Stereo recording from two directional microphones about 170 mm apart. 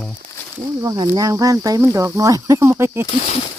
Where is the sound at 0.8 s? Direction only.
20° right (ahead or behind).